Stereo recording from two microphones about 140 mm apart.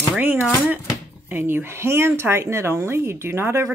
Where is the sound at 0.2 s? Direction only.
15° right (ahead or behind).